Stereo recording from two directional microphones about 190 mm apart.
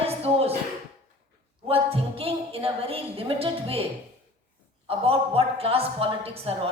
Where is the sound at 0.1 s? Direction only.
30° right (ahead or behind).